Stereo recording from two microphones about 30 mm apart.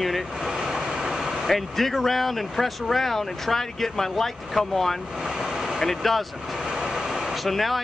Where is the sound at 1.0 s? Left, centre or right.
Centre.